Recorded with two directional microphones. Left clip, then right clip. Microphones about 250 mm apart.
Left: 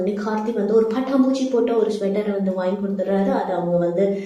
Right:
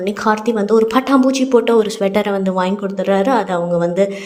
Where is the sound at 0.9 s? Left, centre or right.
Right.